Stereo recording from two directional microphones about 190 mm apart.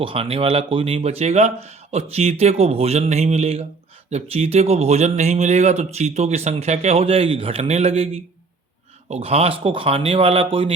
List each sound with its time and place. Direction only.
0.0 s speech: 30° right (ahead or behind)